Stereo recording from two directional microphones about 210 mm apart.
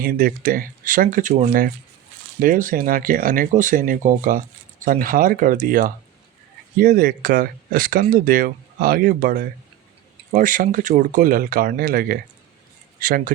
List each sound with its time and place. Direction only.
0.0 s speech: 45° right (ahead or behind)